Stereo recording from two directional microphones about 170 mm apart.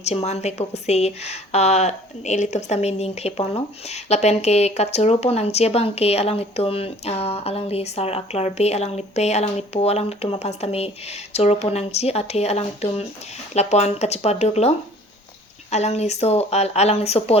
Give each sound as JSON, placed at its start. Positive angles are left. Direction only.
{"t": 0.0, "sound": "speech", "side_deg": 40}
{"t": 15.7, "sound": "speech", "side_deg": 40}